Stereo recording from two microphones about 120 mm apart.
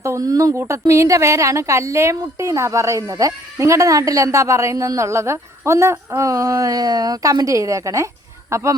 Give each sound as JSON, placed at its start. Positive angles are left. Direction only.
{"t": 0.0, "sound": "a woman's voice", "side_deg": -30}